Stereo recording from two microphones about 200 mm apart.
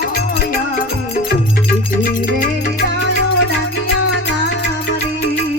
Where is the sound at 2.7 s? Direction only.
55° left (ahead or behind).